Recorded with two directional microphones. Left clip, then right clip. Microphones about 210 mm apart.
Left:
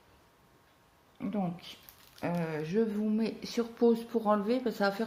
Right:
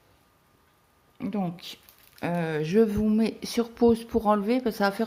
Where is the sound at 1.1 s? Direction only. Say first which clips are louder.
Right 4 dB; 55° right (ahead or behind).